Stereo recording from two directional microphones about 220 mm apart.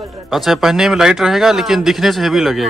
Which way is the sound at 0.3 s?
Centre (ahead or behind).